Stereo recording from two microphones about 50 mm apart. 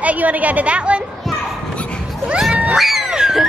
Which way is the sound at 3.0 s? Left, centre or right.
Centre.